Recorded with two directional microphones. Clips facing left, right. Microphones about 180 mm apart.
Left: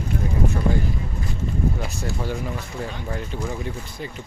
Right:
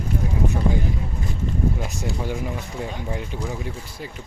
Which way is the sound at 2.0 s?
15° right (ahead or behind).